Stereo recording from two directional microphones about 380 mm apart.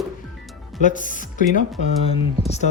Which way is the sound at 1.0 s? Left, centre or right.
Left.